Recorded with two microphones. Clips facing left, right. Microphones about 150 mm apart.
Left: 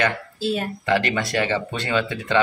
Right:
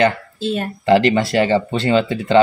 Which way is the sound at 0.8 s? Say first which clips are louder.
Right 9 dB; 30° right (ahead or behind).